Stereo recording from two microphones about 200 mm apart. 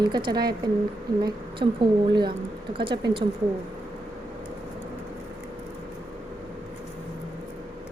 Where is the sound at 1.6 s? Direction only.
50° right (ahead or behind).